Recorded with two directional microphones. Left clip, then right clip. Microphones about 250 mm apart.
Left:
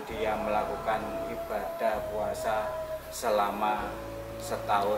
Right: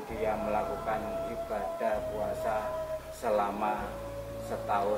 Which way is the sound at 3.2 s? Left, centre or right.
Centre.